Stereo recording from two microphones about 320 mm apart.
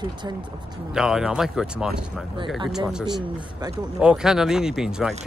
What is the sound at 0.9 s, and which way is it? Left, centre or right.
A man's voice, centre.